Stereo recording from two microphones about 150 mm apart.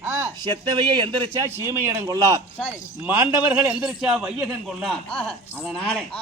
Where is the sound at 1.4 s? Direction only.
15° right (ahead or behind).